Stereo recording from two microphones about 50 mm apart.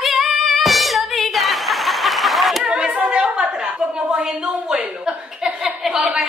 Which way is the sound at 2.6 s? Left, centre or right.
Centre.